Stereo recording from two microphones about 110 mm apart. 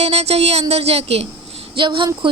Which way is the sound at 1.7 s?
50° right (ahead or behind).